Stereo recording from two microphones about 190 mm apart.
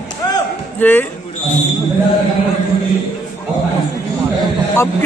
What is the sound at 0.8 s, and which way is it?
Speech, 10° left (ahead or behind).